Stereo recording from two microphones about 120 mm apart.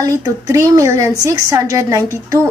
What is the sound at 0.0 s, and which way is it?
A woman's voice, 25° right (ahead or behind).